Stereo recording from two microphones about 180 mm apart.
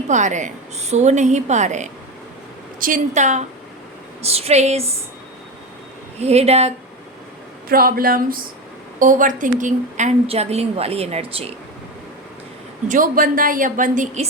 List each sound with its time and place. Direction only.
0.1 s a woman's voice: 40° right (ahead or behind)
6.1 s a woman's voice: 35° right (ahead or behind)
7.7 s a woman's voice: 55° right (ahead or behind); by 11.5 s 35° right (ahead or behind)
12.9 s a woman's voice: 50° right (ahead or behind)